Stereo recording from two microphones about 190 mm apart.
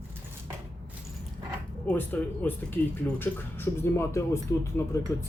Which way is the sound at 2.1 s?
10° left (ahead or behind).